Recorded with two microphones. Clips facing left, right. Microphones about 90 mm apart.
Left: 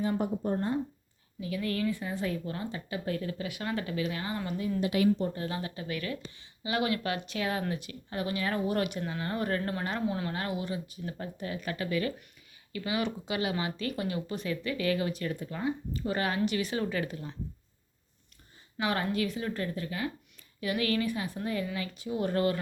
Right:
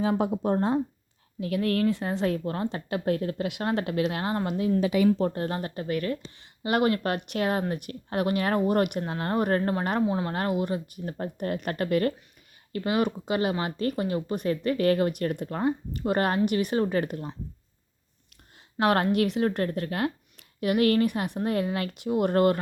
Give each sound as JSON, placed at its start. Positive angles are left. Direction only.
{"t": 0.0, "sound": "speech", "side_deg": -90}
{"t": 1.4, "sound": "speech", "side_deg": -70}
{"t": 2.4, "sound": "speech", "side_deg": -50}
{"t": 2.6, "sound": "speech", "side_deg": -60}
{"t": 4.4, "sound": "a woman's voice", "side_deg": -85}
{"t": 5.0, "sound": "speech", "side_deg": -75}
{"t": 5.4, "sound": "speech", "side_deg": -50}
{"t": 6.6, "sound": "speech", "side_deg": -55}
{"t": 10.2, "sound": "speech", "side_deg": -50}
{"t": 18.8, "sound": "speech", "side_deg": -65}
{"t": 20.6, "sound": "speech", "side_deg": -55}